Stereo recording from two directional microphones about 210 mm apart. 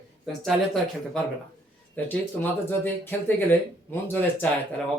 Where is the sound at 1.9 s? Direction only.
10° left (ahead or behind).